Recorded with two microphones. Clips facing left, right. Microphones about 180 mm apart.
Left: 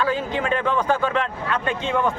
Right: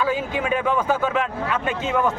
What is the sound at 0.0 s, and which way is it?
Speech, 10° right (ahead or behind).